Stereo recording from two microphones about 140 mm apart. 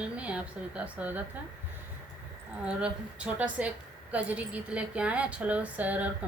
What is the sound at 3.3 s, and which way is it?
A woman's voice, 10° right (ahead or behind).